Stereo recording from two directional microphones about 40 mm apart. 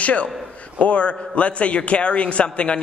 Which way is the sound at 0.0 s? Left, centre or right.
Left.